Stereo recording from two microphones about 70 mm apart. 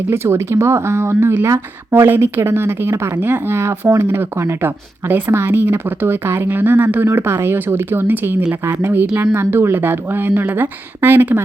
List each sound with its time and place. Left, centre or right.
0.1 s speech: right